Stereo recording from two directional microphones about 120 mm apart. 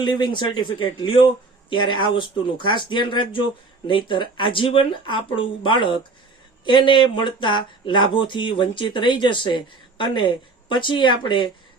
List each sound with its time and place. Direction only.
0.0 s speech: 40° left (ahead or behind)